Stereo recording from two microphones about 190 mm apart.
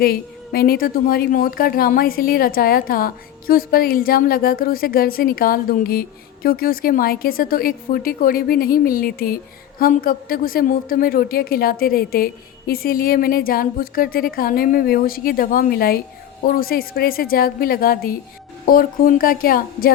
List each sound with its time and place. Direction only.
0.0 s a woman's voice: 50° left (ahead or behind)